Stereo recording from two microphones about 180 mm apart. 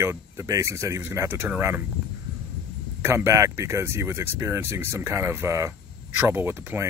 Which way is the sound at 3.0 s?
15° right (ahead or behind).